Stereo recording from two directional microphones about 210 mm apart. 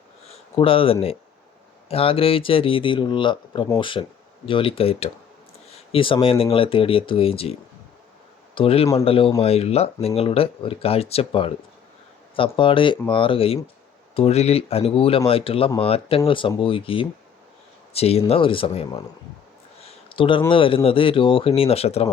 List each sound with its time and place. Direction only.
0.3 s speech: 25° left (ahead or behind)
8.5 s speech: 25° left (ahead or behind)
19.8 s a sound: 25° left (ahead or behind)
20.5 s speech: 25° left (ahead or behind)